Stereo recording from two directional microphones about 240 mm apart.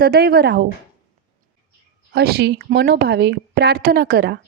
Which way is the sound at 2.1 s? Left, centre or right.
Right.